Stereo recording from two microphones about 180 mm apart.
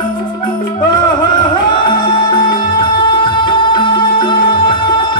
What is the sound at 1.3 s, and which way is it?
Music, 25° left (ahead or behind).